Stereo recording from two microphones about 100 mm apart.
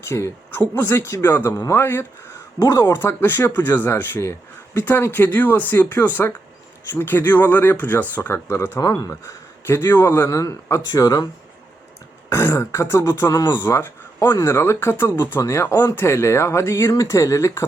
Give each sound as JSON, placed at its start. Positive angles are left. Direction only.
{"t": 0.0, "sound": "speech", "side_deg": 25}
{"t": 2.6, "sound": "speech", "side_deg": 35}
{"t": 12.3, "sound": "speech", "side_deg": 25}
{"t": 15.7, "sound": "speech", "side_deg": 40}
{"t": 16.0, "sound": "speech", "side_deg": 25}